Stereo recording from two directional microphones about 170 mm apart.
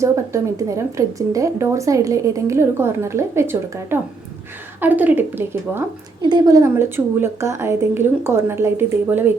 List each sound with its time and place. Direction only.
0.0 s speech: 20° right (ahead or behind)
6.2 s speech: 25° right (ahead or behind)